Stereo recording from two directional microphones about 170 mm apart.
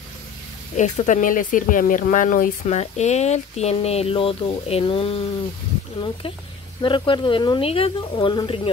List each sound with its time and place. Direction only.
0.7 s speech: 45° left (ahead or behind)
6.8 s speech: 30° left (ahead or behind)